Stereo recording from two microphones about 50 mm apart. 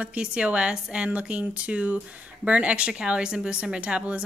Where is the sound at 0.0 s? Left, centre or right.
Right.